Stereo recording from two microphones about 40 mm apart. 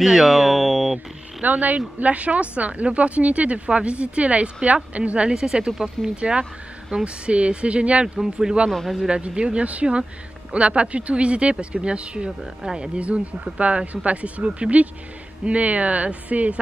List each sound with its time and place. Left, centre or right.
0.0 s speech: centre
1.4 s a woman's voice: right
5.3 s speech: centre
8.2 s a woman's voice: centre; by 16.5 s right